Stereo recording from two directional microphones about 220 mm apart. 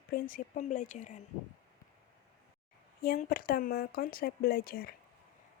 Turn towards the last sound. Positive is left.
turn(degrees=45)  # may be behind; listen again after turning